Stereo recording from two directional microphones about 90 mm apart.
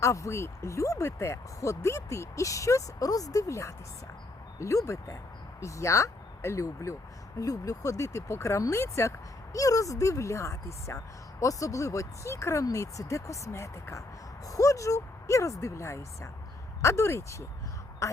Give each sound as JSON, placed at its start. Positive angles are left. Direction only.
{"t": 0.0, "sound": "speech", "side_deg": 35}